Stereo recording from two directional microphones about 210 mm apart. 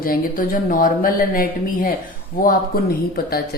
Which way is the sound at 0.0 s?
40° left (ahead or behind).